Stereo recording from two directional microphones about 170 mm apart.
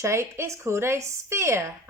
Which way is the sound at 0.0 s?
15° right (ahead or behind).